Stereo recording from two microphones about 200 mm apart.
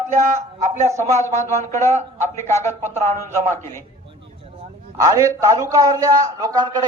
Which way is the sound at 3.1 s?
35° right (ahead or behind).